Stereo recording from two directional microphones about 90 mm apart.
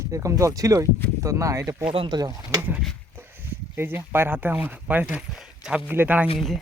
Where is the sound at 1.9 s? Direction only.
80° right.